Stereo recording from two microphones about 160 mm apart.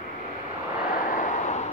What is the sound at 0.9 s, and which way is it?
Vehicle, 60° left (ahead or behind).